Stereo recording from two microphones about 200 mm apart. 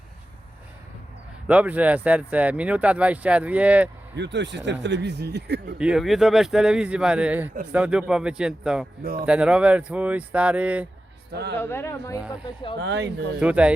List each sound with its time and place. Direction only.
1.5 s speech: 5° right (ahead or behind)
4.1 s speech: 60° right (ahead or behind)
5.8 s a man's voice: 5° right (ahead or behind)
11.3 s speech: 55° right (ahead or behind)
11.5 s speech: 10° left (ahead or behind)
12.8 s speech: 60° right (ahead or behind)
13.4 s a man's voice: 5° right (ahead or behind)